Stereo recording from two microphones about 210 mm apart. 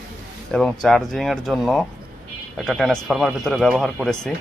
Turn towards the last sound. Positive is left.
turn(degrees=0)  # may be behind; listen again after turning